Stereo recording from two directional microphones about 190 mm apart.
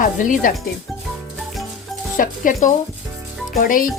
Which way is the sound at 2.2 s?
45° left (ahead or behind).